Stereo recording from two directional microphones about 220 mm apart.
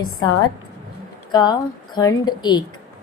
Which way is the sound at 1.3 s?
15° left (ahead or behind).